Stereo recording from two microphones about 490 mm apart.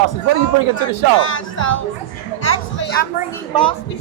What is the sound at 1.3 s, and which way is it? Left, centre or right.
Speech, left.